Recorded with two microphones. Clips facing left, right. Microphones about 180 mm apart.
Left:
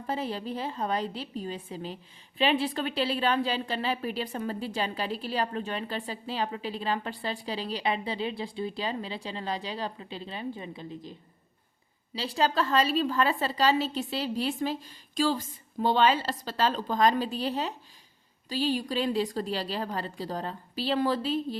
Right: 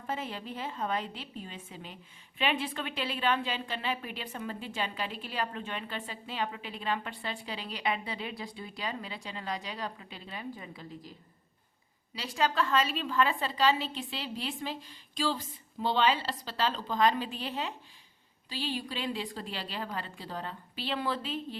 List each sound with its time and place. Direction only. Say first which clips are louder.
0.1 s a woman's voice: left 5 dB; 35° left (ahead or behind)
12.1 s a woman's voice: left 3 dB; 30° left (ahead or behind)